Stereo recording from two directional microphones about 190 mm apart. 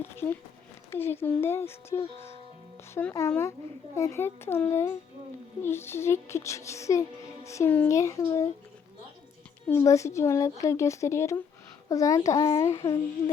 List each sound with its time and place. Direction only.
0.0 s speech: 10° left (ahead or behind)
9.6 s speech: 15° left (ahead or behind)